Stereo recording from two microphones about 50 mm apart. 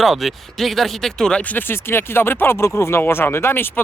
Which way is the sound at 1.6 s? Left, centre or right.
Left.